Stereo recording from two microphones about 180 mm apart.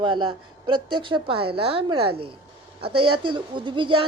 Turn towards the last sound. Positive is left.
turn(degrees=-25)  # may be behind; listen again after turning